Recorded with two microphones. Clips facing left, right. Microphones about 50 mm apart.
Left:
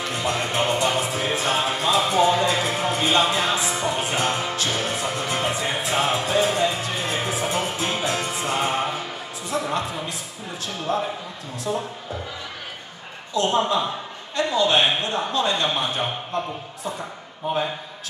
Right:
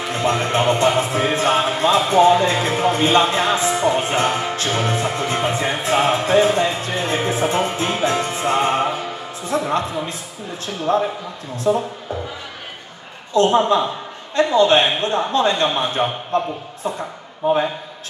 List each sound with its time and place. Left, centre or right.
0.2 s music: right
9.5 s a man's voice: right
13.4 s a man's voice: right